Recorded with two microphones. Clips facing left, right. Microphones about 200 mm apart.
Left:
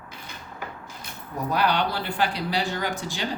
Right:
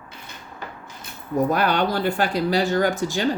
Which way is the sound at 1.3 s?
50° right (ahead or behind).